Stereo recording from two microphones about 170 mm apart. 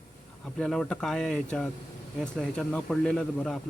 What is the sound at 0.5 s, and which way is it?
Speech, 5° left (ahead or behind).